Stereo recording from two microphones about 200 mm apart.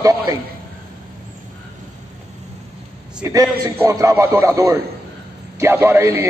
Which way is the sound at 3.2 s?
15° right (ahead or behind).